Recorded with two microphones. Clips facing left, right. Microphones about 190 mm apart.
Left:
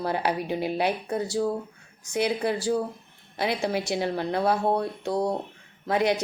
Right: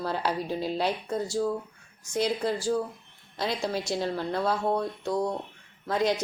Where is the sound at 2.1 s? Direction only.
65° left (ahead or behind).